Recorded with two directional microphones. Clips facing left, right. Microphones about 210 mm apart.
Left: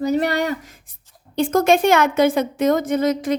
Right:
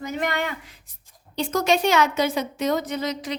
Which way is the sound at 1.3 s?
50° left (ahead or behind).